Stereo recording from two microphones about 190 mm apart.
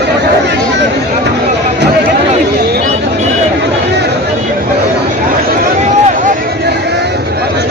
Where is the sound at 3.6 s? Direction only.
65° right (ahead or behind).